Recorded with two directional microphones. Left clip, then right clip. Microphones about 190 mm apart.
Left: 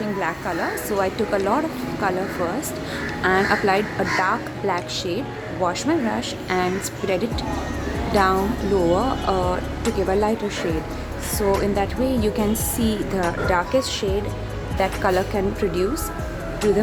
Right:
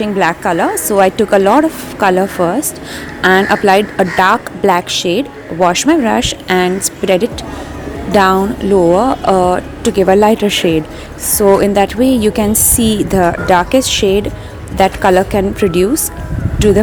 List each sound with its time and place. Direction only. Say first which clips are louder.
0.0 s a woman's voice: right 12 dB; 40° right (ahead or behind)